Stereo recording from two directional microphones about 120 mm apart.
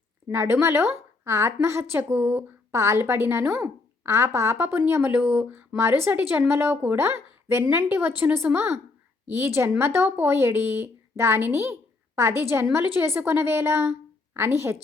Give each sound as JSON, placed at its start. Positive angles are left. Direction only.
{"t": 0.3, "sound": "a woman's voice", "side_deg": -20}
{"t": 5.1, "sound": "a woman's voice", "side_deg": -10}